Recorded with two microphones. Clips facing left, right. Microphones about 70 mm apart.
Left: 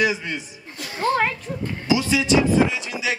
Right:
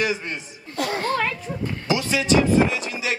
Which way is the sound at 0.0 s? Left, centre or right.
Right.